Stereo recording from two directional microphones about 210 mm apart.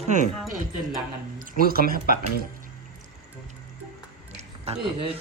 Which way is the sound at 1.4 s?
45° right (ahead or behind).